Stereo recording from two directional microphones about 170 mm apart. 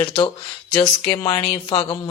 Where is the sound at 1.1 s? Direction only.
25° left (ahead or behind).